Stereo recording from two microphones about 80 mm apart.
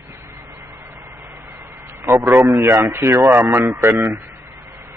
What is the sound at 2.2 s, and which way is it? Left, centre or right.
A man's voice, right.